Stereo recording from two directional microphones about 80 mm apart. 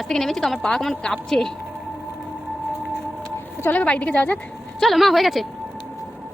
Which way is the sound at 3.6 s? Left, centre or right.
Centre.